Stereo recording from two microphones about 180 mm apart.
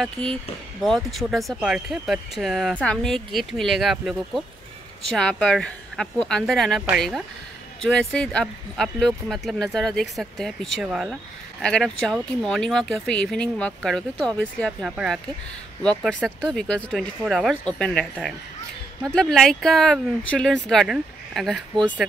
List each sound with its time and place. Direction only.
0.0 s speech: centre (ahead or behind)
15.8 s speech: 5° left (ahead or behind)
19.0 s speech: 5° left (ahead or behind)